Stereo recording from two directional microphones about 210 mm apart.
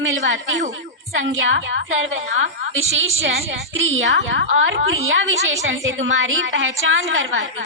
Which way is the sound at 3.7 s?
65° right (ahead or behind).